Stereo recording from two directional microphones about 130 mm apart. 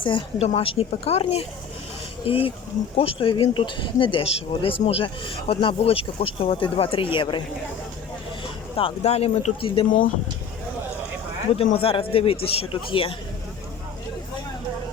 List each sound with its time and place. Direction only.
0.0 s a woman's voice: 40° left (ahead or behind)
8.7 s speech: 50° left (ahead or behind)
11.5 s speech: 45° left (ahead or behind)